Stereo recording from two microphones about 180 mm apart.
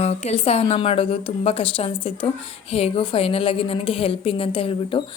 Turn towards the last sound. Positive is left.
turn(degrees=30)  # may be behind; listen again after turning